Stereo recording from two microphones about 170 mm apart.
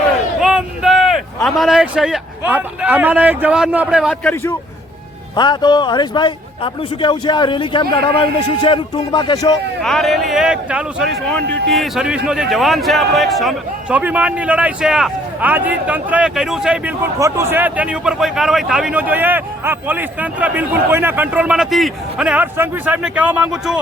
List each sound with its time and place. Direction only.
0.4 s speech: 5° right (ahead or behind)
4.2 s a man's voice: 10° left (ahead or behind)
5.4 s a man's voice: 25° left (ahead or behind)
9.8 s a man's voice: centre (ahead or behind)
17.2 s speech: 15° right (ahead or behind)